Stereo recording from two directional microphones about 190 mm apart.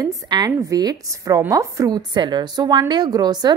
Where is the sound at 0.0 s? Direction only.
20° right (ahead or behind).